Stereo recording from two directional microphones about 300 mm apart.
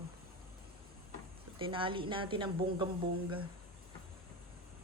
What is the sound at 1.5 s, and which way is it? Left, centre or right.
Speech, centre.